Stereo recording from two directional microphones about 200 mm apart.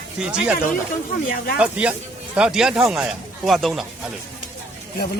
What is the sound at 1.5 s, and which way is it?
Speech, 5° right (ahead or behind).